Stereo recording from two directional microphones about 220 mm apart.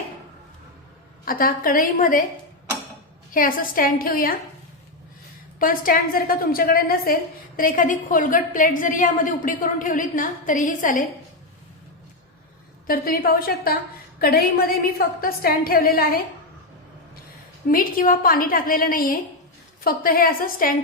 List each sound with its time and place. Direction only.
1.2 s a woman's voice: 40° left (ahead or behind)
3.3 s a woman's voice: 40° left (ahead or behind)
5.5 s a woman's voice: 40° left (ahead or behind)
12.9 s a woman's voice: 40° left (ahead or behind)
17.7 s a woman's voice: 40° left (ahead or behind)